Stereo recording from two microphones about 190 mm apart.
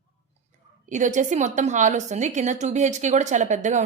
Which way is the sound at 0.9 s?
40° right (ahead or behind).